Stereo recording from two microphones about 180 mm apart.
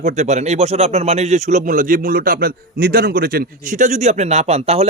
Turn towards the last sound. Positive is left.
turn(degrees=-35)  # may be behind; listen again after turning